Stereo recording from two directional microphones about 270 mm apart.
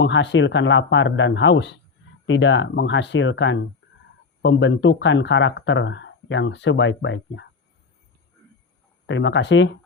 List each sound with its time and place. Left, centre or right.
0.0 s speech: left
9.0 s speech: left